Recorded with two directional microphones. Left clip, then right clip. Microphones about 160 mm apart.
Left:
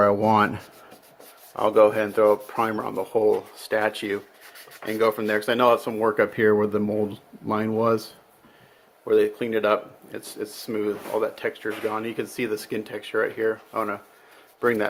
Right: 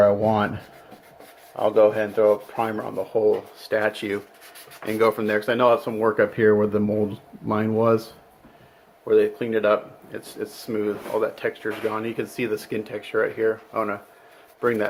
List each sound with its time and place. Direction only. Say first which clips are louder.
0.0 s speech: even; 55° left (ahead or behind)
3.1 s speech: right 1 dB; 45° left (ahead or behind)
3.6 s speech: right 1 dB; 25° left (ahead or behind)
4.9 s speech: right 2 dB; centre (ahead or behind)
5.2 s speech: right 1 dB; 25° left (ahead or behind)